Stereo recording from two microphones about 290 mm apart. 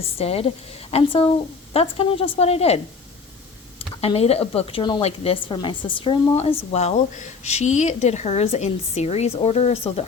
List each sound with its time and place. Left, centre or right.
0.0 s speech: centre